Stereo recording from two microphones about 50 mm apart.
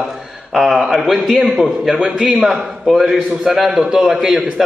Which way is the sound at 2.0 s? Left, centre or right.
Centre.